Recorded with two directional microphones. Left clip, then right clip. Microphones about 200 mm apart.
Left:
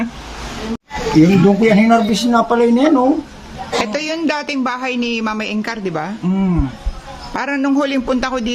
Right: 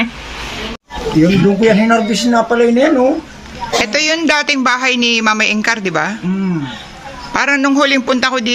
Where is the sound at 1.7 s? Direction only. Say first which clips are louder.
Right 1 dB; 55° left (ahead or behind).